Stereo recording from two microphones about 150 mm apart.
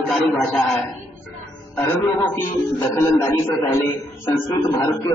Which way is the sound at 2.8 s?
15° left (ahead or behind).